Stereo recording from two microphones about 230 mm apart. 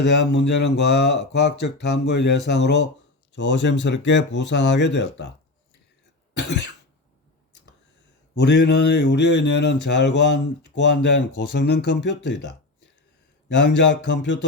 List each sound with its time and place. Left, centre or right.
0.0 s speech: left
6.3 s speech: left
8.4 s speech: left
13.5 s speech: left